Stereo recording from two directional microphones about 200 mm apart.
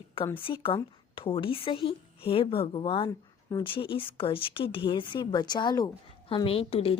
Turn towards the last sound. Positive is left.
turn(degrees=30)  # may be behind; listen again after turning